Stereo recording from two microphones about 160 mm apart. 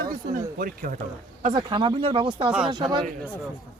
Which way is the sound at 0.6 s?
60° right (ahead or behind).